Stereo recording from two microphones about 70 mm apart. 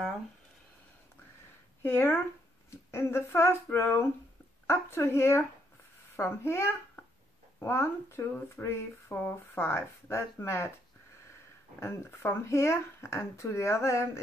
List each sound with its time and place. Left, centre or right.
1.8 s speech: left
11.8 s speech: left